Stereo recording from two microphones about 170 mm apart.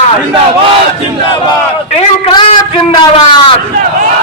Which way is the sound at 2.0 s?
35° left (ahead or behind).